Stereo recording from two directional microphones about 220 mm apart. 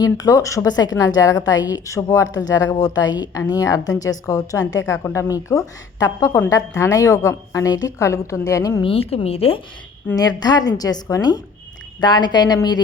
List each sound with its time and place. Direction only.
0.0 s a woman's voice: 15° left (ahead or behind)